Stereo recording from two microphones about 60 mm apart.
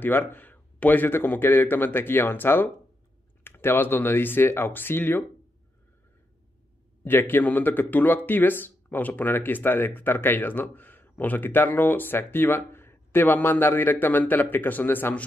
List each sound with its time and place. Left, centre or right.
0.3 s speech: left
7.1 s speech: left